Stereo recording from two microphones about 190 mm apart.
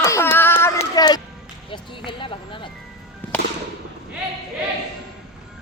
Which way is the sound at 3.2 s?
10° left (ahead or behind).